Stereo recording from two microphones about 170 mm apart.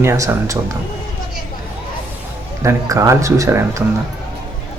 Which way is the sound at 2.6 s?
20° right (ahead or behind).